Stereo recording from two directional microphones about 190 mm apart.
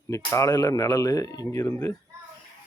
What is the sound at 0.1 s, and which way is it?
Speech, 15° left (ahead or behind).